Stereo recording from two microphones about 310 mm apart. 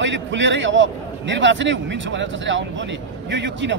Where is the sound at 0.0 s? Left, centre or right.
Right.